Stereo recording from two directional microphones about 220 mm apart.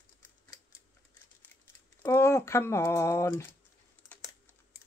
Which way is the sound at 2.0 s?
10° left (ahead or behind).